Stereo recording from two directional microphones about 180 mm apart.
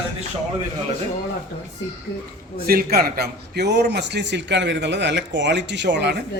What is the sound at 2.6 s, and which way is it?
A man's voice, 55° right (ahead or behind).